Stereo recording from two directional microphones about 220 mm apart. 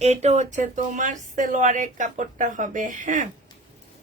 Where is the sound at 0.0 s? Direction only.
30° right (ahead or behind).